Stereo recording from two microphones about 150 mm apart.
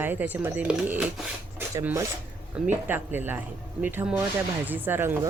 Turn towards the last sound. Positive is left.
turn(degrees=-15)  # may be behind; listen again after turning